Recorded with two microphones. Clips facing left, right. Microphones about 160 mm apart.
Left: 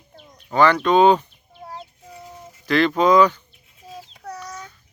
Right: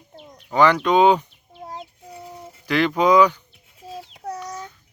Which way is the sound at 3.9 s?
30° right (ahead or behind).